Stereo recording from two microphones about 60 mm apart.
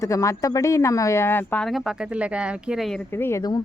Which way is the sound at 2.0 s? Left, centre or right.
Centre.